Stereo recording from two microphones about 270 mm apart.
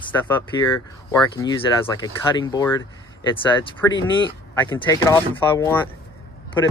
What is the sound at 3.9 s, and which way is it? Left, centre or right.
Speech, centre.